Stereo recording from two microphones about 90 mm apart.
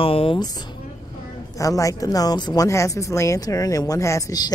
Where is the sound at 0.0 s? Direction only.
90° left.